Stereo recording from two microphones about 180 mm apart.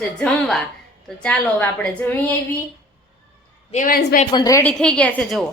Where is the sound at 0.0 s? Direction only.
Centre (ahead or behind).